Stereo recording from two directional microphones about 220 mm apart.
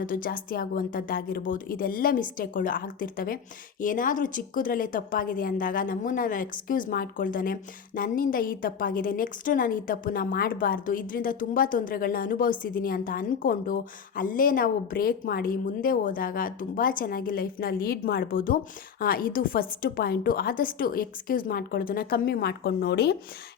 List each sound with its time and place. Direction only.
0.0 s a woman's voice: 40° left (ahead or behind)